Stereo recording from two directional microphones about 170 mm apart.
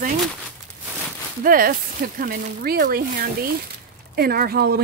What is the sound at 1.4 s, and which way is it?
Speech, 55° right (ahead or behind).